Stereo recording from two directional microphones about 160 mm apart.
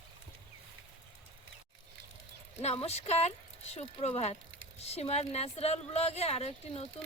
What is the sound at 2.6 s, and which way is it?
Speech, 40° left (ahead or behind).